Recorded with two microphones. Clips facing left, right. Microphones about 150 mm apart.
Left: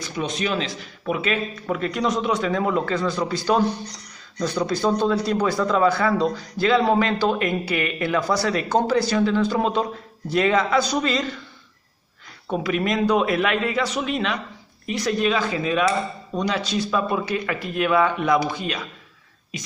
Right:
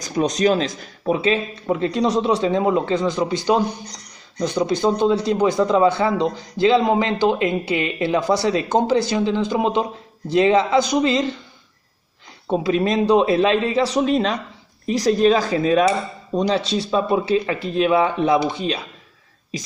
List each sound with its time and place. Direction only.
0.0 s speech: 40° right (ahead or behind); by 11.3 s 25° right (ahead or behind)
12.4 s a woman's voice: 30° right (ahead or behind)